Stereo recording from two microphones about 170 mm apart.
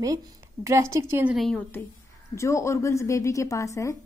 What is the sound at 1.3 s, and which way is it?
Speech, 5° left (ahead or behind).